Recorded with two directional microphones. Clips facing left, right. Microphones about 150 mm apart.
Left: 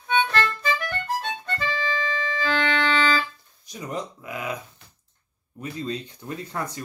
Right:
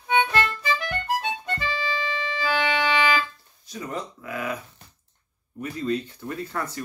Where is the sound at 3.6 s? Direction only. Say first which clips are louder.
Left 1 dB; 15° left (ahead or behind).